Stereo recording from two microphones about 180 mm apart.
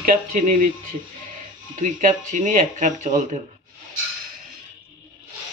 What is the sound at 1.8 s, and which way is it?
Speech, 45° right (ahead or behind).